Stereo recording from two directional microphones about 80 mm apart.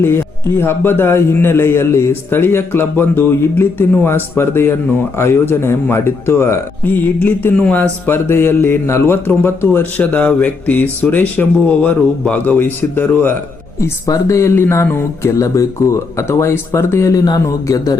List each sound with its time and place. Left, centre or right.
0.0 s a man's voice: left
7.2 s a man's voice: centre
10.1 s a man's voice: centre
14.1 s a man's voice: left